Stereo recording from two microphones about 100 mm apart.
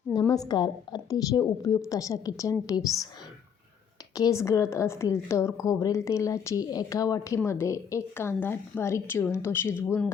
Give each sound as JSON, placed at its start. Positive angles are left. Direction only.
{"t": 0.1, "sound": "a woman's voice", "side_deg": 45}
{"t": 4.1, "sound": "a woman's voice", "side_deg": 35}